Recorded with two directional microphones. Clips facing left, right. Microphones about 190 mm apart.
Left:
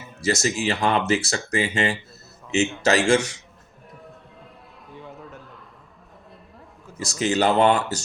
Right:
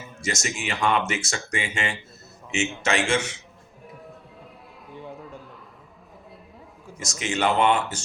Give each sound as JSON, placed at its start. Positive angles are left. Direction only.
{"t": 0.2, "sound": "speech", "side_deg": 35}
{"t": 7.0, "sound": "speech", "side_deg": 35}